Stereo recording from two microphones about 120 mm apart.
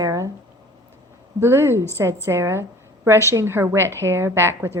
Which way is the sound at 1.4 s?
20° right (ahead or behind).